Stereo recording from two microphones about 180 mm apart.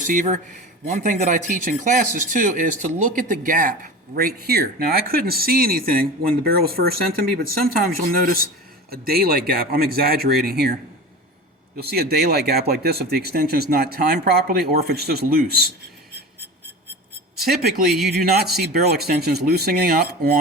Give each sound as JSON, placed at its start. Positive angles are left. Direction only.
{"t": 0.0, "sound": "speech", "side_deg": -45}
{"t": 11.8, "sound": "speech", "side_deg": -60}
{"t": 17.4, "sound": "speech", "side_deg": -60}
{"t": 17.9, "sound": "speech", "side_deg": 0}
{"t": 18.6, "sound": "speech", "side_deg": -60}